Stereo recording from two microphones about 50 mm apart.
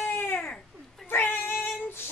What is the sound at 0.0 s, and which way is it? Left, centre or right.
Baby cry, left.